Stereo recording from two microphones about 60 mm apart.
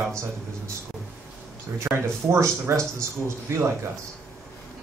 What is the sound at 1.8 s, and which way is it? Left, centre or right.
Speech, right.